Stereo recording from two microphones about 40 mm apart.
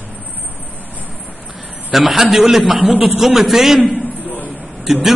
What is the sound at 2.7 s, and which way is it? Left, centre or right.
Speech, right.